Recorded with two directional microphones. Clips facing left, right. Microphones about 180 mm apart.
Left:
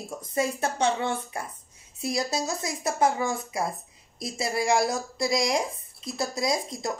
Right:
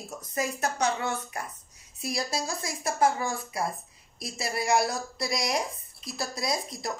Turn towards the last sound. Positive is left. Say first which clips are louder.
# left 4 dB
turn(degrees=25)  # may be behind; listen again after turning